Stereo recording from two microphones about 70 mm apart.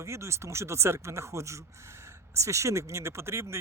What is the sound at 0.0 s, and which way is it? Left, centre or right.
Speech, right.